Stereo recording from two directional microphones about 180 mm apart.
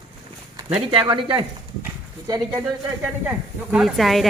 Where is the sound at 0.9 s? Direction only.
30° right (ahead or behind).